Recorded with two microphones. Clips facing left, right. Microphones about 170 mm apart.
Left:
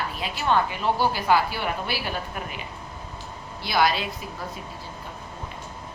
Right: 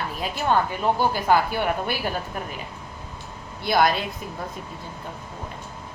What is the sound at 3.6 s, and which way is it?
Speech, 50° right (ahead or behind).